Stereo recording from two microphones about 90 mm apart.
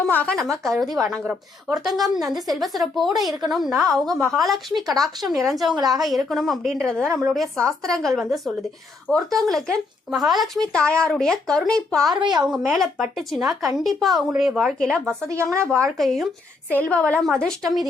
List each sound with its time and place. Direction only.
0.0 s speech: 15° left (ahead or behind)
0.3 s a woman's voice: 5° left (ahead or behind)
5.7 s a woman's voice: 45° right (ahead or behind)
6.0 s a woman's voice: centre (ahead or behind)
8.2 s a woman's voice: 5° right (ahead or behind)
9.0 s speech: 5° left (ahead or behind)
12.2 s a woman's voice: 50° right (ahead or behind)
12.5 s a woman's voice: centre (ahead or behind)
13.5 s speech: 40° right (ahead or behind)
13.7 s a woman's voice: centre (ahead or behind)
15.3 s speech: 35° right (ahead or behind)
16.0 s a woman's voice: centre (ahead or behind)
16.9 s speech: 10° left (ahead or behind)